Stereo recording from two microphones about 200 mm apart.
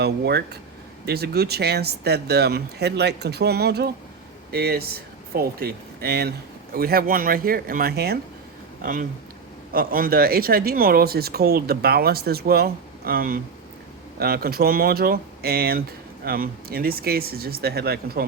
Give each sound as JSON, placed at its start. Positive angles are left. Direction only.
{"t": 0.0, "sound": "speech", "side_deg": -55}